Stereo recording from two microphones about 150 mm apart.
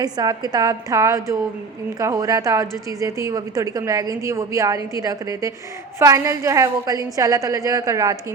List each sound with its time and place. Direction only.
0.0 s a woman's voice: 25° right (ahead or behind)